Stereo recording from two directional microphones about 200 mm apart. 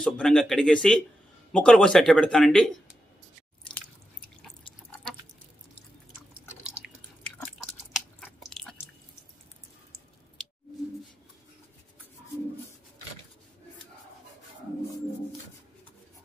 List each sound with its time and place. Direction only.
0.0 s speech: 5° left (ahead or behind)
3.7 s drip: centre (ahead or behind)
6.6 s drip: 5° right (ahead or behind)
7.3 s chewing: 5° left (ahead or behind)
8.5 s a sound: centre (ahead or behind)